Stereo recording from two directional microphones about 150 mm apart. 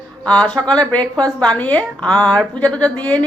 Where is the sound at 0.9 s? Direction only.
10° left (ahead or behind).